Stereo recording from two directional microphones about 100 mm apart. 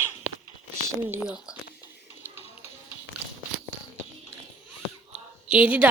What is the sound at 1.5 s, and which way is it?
Speech, 10° right (ahead or behind).